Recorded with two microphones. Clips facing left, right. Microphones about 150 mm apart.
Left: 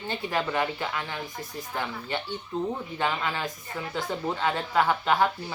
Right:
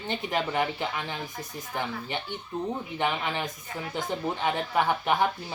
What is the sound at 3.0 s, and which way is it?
A woman's voice, 20° right (ahead or behind).